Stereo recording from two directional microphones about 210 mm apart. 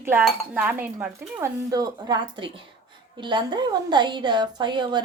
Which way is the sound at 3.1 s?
20° right (ahead or behind).